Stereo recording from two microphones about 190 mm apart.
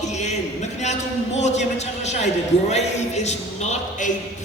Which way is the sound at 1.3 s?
35° left (ahead or behind).